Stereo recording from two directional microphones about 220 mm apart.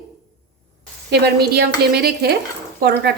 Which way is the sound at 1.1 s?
45° right (ahead or behind).